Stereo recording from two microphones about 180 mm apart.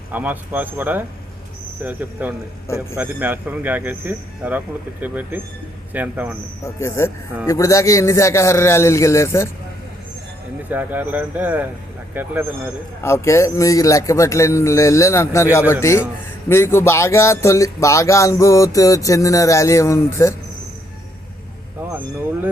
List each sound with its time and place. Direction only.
0.1 s a man's voice: 10° right (ahead or behind)
6.7 s speech: 15° left (ahead or behind)
10.7 s a man's voice: 10° right (ahead or behind)
13.0 s speech: 15° left (ahead or behind)